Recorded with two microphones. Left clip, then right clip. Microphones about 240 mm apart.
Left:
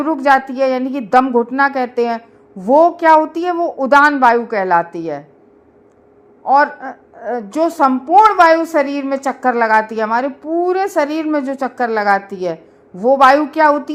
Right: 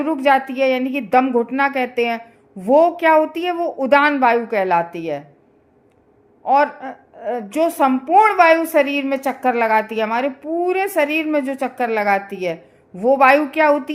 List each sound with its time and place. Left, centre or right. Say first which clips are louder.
0.0 s a woman's voice: left 3 dB; left
6.4 s a woman's voice: left 3 dB; left